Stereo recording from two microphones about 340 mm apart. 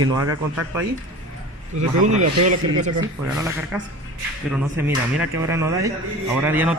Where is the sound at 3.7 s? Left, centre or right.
Centre.